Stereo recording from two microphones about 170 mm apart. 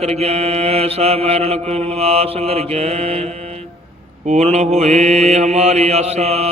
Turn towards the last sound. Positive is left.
turn(degrees=-40)  # may be behind; listen again after turning